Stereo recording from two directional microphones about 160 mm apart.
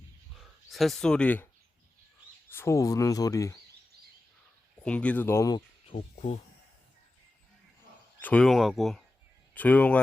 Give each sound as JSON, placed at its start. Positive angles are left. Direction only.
{"t": 0.3, "sound": "speech", "side_deg": 0}
{"t": 2.5, "sound": "speech", "side_deg": 15}
{"t": 4.8, "sound": "speech", "side_deg": 10}
{"t": 5.9, "sound": "speech", "side_deg": 40}
{"t": 8.2, "sound": "speech", "side_deg": 5}